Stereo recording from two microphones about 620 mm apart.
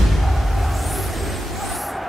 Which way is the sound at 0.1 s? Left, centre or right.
Centre.